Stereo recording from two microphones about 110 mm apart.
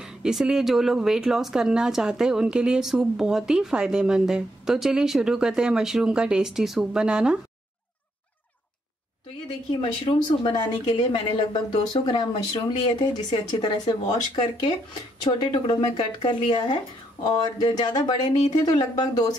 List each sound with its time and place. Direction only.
0.0 s speech: 5° right (ahead or behind)
10.5 s speech: 40° left (ahead or behind)
10.9 s speech: 50° left (ahead or behind)